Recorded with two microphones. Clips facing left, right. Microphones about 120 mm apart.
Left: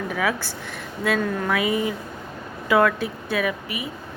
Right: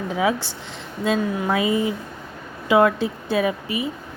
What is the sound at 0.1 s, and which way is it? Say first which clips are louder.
Speech: right 6 dB; 25° right (ahead or behind).